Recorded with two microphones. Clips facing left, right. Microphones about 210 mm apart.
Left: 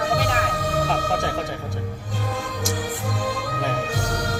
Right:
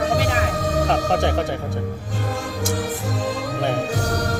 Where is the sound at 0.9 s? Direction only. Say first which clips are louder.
Right 4 dB; 65° right (ahead or behind).